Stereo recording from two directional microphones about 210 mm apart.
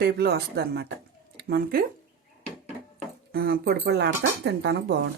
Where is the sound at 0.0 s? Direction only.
50° right (ahead or behind).